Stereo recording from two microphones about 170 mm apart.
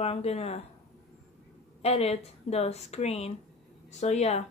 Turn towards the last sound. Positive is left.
turn(degrees=40)  # may be behind; listen again after turning